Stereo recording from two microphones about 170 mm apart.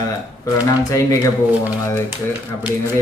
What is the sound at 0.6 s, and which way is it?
Speech, 20° left (ahead or behind).